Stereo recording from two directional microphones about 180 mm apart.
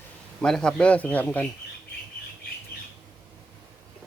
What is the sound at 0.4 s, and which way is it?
A man's voice, centre (ahead or behind).